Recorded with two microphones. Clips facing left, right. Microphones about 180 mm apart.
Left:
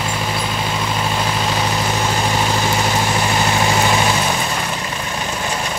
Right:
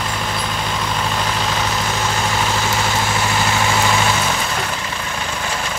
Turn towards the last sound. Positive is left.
turn(degrees=15)  # may be behind; listen again after turning